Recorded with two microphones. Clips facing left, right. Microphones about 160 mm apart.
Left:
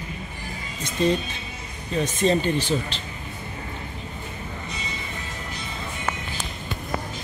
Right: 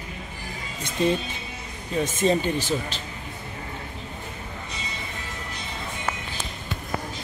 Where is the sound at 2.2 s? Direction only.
10° right (ahead or behind).